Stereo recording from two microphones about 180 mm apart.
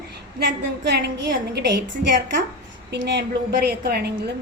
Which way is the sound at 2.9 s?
70° right (ahead or behind).